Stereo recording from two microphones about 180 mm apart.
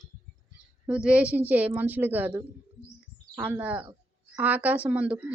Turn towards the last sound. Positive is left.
turn(degrees=-5)  # may be behind; listen again after turning